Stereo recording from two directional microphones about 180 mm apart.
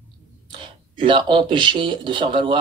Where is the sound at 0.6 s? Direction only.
30° right (ahead or behind).